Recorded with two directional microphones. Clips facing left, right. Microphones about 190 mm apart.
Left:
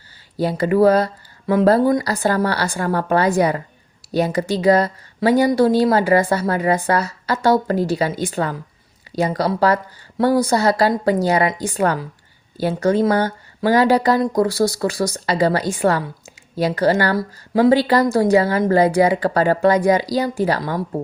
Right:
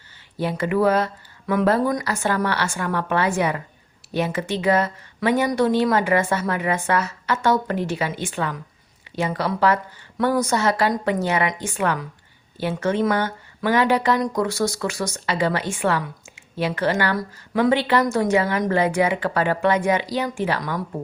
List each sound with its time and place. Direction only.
0.3 s a woman's voice: 35° left (ahead or behind)